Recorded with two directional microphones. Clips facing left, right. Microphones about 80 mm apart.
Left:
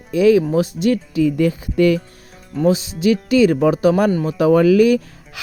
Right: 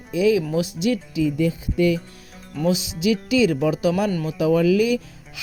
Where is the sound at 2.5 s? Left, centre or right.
Left.